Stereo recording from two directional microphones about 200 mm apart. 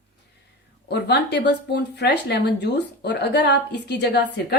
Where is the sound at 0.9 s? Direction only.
55° left (ahead or behind).